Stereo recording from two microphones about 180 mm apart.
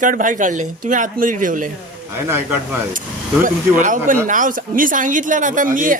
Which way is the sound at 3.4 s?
45° right (ahead or behind).